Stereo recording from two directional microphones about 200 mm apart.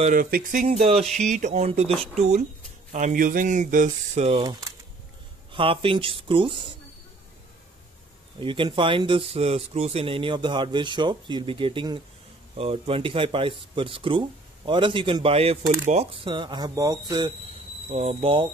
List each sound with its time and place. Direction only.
0.0 s speech: 40° right (ahead or behind)
0.7 s speech: 30° right (ahead or behind)
8.4 s speech: 25° right (ahead or behind)
17.9 s speech: 30° right (ahead or behind)